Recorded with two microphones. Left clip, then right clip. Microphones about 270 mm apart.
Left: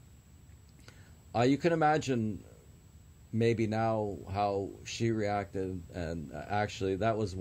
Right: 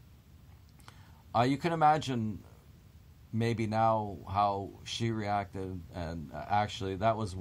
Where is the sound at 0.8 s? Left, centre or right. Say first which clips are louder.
Right 2 dB; centre.